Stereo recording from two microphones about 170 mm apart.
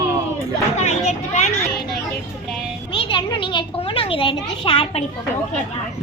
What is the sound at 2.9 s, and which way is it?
A child's voice, 30° left (ahead or behind).